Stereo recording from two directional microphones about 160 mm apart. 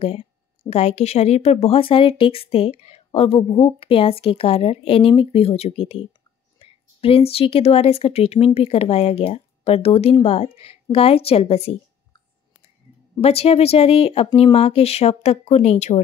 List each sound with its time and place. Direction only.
0.0 s speech: 40° left (ahead or behind)
13.2 s speech: 40° left (ahead or behind)